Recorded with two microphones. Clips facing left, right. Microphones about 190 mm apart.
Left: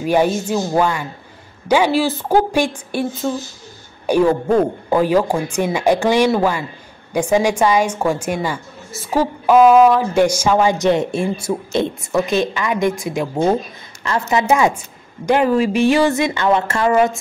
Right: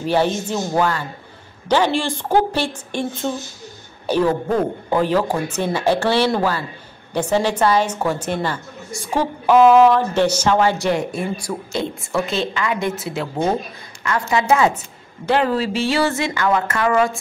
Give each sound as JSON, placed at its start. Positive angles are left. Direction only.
{"t": 0.0, "sound": "a woman's voice", "side_deg": 10}
{"t": 4.0, "sound": "a sound", "side_deg": 10}
{"t": 4.8, "sound": "a woman's voice", "side_deg": 10}
{"t": 14.0, "sound": "a woman's voice", "side_deg": 25}
{"t": 14.5, "sound": "a woman's voice", "side_deg": 15}